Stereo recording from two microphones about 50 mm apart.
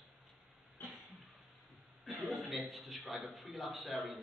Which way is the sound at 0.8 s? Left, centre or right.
Left.